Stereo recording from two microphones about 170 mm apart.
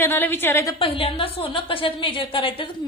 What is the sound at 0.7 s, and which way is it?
A woman's voice, 30° left (ahead or behind).